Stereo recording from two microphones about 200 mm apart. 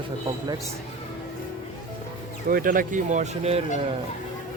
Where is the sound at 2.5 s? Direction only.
45° right (ahead or behind).